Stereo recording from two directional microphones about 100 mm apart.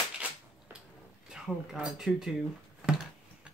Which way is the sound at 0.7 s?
25° right (ahead or behind).